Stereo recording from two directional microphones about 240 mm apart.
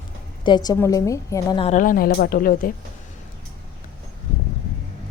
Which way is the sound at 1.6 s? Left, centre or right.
Left.